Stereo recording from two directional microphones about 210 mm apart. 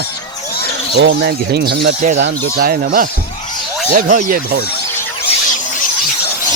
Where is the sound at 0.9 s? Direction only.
50° right (ahead or behind).